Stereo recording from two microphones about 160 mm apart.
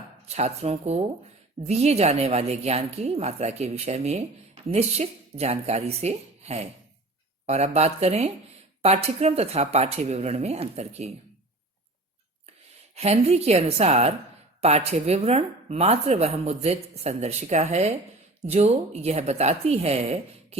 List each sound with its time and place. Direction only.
0.3 s a woman's voice: 45° right (ahead or behind)
13.0 s speech: 40° right (ahead or behind)